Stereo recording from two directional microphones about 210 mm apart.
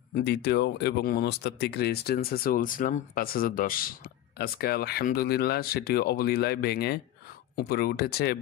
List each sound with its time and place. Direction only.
0.1 s speech: 50° left (ahead or behind)